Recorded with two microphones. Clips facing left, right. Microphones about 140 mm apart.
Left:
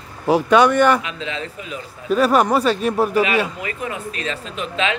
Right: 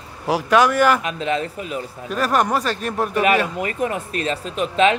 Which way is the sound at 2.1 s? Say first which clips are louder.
Left 4 dB; centre (ahead or behind).